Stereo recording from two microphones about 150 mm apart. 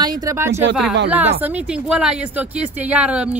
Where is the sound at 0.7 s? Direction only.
5° right (ahead or behind).